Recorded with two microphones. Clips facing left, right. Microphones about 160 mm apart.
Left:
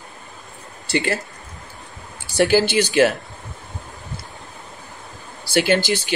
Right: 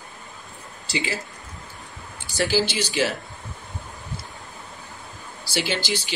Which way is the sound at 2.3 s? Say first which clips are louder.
Left 7 dB; 60° left (ahead or behind).